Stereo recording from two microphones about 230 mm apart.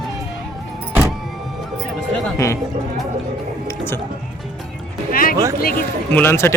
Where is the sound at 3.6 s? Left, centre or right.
Centre.